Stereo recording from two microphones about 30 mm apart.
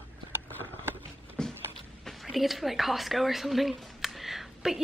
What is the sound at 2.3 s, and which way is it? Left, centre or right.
Speech, centre.